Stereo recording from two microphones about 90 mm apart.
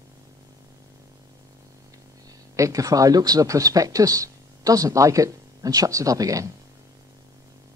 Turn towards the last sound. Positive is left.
turn(degrees=-40)  # may be behind; listen again after turning